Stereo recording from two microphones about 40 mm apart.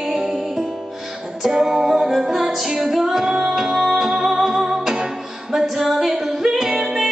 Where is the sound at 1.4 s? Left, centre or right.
Centre.